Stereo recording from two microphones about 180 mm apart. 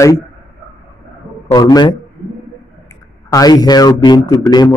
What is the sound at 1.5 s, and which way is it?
Speech, 25° left (ahead or behind).